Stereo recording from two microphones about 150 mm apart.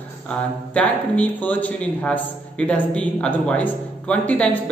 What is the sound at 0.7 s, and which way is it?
A man's voice, 10° left (ahead or behind).